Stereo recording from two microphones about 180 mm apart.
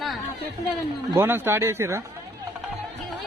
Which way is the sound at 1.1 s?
15° right (ahead or behind).